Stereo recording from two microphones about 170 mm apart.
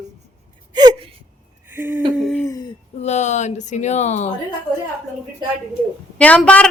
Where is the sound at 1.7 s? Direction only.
10° right (ahead or behind).